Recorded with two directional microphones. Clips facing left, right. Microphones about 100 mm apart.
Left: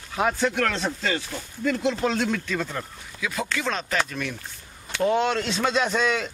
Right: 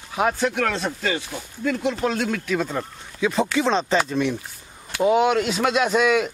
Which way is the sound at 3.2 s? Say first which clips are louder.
Right 8 dB; 25° right (ahead or behind).